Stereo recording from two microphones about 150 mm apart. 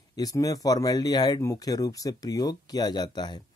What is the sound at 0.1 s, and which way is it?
Speech, 25° left (ahead or behind).